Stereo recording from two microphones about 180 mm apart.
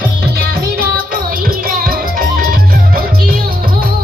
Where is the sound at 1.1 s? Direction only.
55° right (ahead or behind).